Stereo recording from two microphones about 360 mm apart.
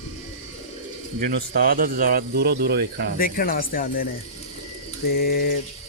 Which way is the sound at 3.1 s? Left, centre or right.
Left.